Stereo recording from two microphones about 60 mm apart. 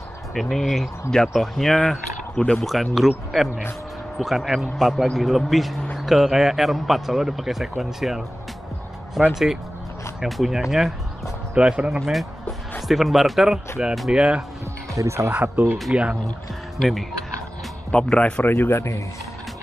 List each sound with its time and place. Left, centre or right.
0.3 s speech: centre
9.3 s speech: centre
12.1 s music: centre
12.8 s speech: centre
15.0 s speech: right
15.9 s speech: centre
18.1 s speech: centre
18.4 s speech: left